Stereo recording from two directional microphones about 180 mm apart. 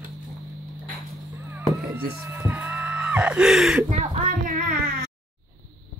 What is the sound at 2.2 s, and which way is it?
Music, 15° right (ahead or behind).